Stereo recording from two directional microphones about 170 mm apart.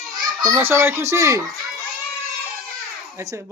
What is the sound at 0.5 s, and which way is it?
Speech, 15° right (ahead or behind).